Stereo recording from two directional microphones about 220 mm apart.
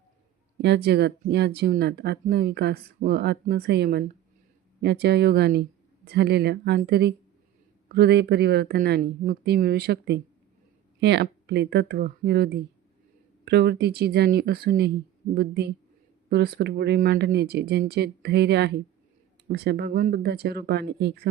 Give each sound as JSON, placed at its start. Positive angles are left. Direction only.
{"t": 0.6, "sound": "speech", "side_deg": -50}